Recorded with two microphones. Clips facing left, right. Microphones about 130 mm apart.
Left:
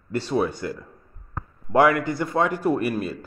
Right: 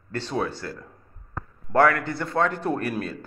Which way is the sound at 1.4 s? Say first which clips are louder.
Left 1 dB; 15° left (ahead or behind).